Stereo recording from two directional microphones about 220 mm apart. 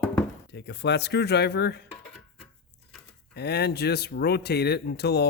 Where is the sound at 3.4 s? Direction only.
50° left (ahead or behind).